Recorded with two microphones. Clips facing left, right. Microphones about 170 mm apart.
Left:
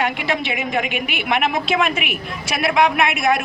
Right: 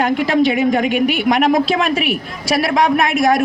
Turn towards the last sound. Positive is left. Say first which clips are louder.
# right 4 dB
turn(degrees=-35)  # may be behind; listen again after turning